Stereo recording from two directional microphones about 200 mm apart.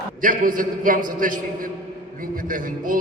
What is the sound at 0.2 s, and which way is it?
A man's voice, 45° right (ahead or behind).